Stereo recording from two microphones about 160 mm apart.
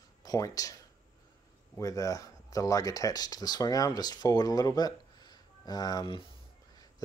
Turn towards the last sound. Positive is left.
turn(degrees=30)  # may be behind; listen again after turning